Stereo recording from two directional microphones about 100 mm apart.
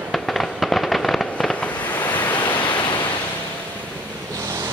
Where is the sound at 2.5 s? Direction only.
50° left (ahead or behind).